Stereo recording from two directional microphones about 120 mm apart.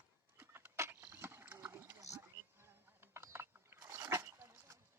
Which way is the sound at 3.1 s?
20° right (ahead or behind).